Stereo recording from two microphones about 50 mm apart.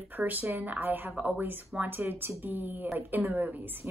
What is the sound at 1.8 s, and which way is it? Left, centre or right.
A woman's voice, right.